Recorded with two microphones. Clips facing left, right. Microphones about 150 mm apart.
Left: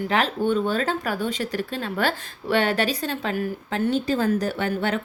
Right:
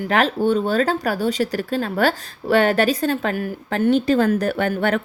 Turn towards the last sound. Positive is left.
turn(degrees=-55)  # may be behind; listen again after turning